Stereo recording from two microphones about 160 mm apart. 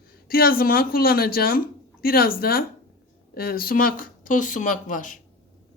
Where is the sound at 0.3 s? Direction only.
70° left (ahead or behind).